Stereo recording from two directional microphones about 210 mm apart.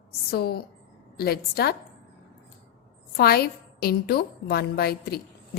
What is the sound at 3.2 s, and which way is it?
A woman's voice, 50° left (ahead or behind).